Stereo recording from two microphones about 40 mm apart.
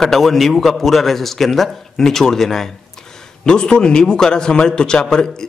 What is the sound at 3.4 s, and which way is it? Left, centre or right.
A man's voice, left.